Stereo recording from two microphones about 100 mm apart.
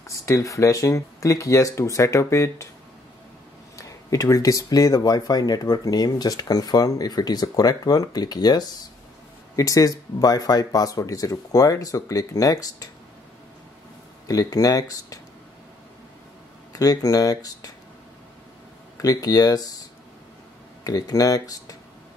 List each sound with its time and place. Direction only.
0.0 s speech: 30° left (ahead or behind)
3.7 s speech: 35° left (ahead or behind)
14.2 s speech: 35° left (ahead or behind)
16.7 s speech: 40° left (ahead or behind)
18.9 s speech: 40° left (ahead or behind)
20.8 s speech: 35° left (ahead or behind)